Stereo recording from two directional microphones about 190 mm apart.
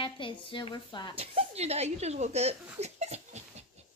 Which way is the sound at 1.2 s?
30° right (ahead or behind).